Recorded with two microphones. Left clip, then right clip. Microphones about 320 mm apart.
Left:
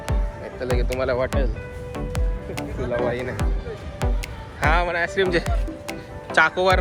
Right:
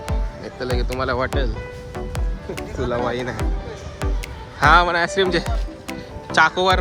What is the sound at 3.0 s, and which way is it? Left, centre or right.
Speech, centre.